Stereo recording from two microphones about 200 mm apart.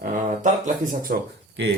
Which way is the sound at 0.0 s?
45° right (ahead or behind).